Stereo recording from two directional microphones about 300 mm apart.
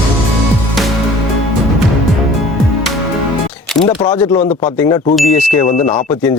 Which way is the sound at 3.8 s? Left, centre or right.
Centre.